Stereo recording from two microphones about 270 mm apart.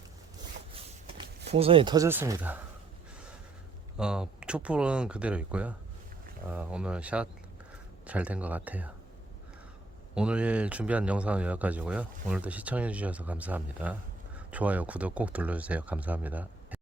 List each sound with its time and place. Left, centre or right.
0.7 s a sound: right
1.5 s speech: right
3.9 s speech: centre
10.2 s speech: centre